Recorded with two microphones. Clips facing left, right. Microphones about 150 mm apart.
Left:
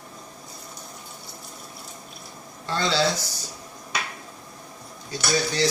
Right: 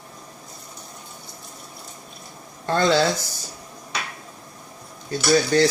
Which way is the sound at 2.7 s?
50° right (ahead or behind).